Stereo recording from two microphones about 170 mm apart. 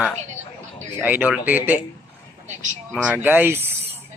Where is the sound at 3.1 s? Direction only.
10° right (ahead or behind).